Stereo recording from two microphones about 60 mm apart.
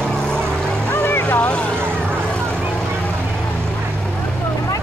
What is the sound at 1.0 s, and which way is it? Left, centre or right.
Vehicle, left.